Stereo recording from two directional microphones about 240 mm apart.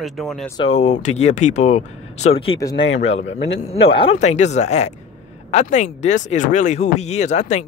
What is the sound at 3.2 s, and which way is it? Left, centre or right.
Speech, left.